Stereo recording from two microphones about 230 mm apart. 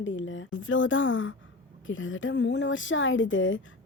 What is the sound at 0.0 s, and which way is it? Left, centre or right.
Speech, left.